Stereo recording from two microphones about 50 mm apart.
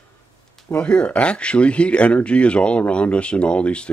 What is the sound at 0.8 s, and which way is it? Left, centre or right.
Speech, left.